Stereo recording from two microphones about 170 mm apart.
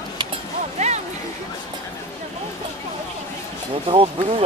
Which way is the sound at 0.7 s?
40° right (ahead or behind).